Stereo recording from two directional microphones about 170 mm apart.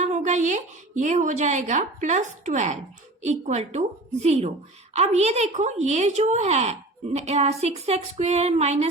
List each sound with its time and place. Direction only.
0.0 s a woman's voice: 45° right (ahead or behind)